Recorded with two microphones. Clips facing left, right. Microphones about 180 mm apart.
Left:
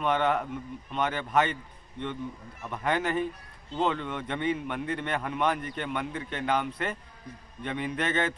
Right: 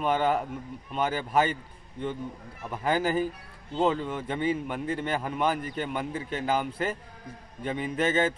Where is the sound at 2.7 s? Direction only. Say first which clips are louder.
Right 2 dB; 5° right (ahead or behind).